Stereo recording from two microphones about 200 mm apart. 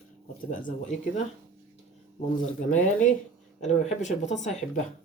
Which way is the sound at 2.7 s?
40° left (ahead or behind).